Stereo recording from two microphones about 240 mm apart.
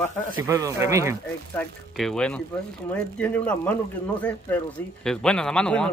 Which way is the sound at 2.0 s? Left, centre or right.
Centre.